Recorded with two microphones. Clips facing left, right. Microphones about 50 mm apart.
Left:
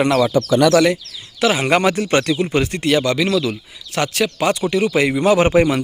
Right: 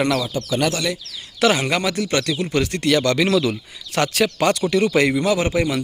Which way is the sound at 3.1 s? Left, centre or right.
Centre.